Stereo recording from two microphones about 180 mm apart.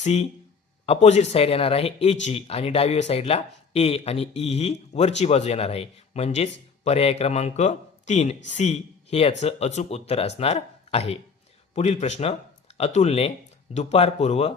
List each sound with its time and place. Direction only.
0.0 s speech: 35° left (ahead or behind)